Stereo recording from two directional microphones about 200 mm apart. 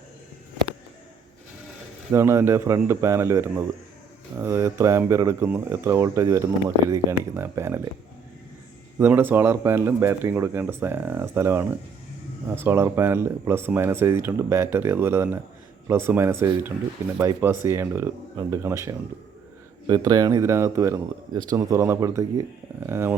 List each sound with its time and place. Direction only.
2.1 s speech: 15° right (ahead or behind)
9.0 s speech: 10° right (ahead or behind)